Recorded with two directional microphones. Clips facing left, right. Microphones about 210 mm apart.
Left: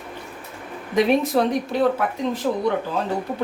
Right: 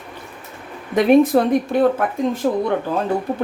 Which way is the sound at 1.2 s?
50° right (ahead or behind).